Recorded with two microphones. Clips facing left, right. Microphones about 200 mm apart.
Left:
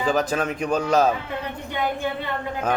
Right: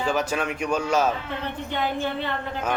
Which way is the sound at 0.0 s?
35° left (ahead or behind).